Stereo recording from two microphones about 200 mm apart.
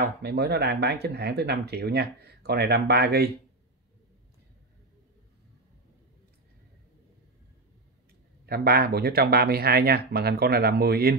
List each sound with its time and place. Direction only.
0.0 s speech: 55° right (ahead or behind)
8.5 s speech: 50° right (ahead or behind)